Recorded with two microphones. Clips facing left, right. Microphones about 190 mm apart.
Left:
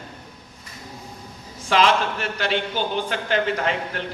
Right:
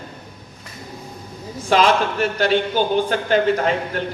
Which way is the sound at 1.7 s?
40° right (ahead or behind).